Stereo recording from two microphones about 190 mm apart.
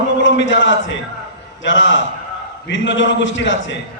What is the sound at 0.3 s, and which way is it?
A man's voice, 75° left (ahead or behind).